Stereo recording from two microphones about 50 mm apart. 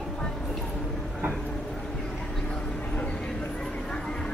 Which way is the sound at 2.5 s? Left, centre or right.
Left.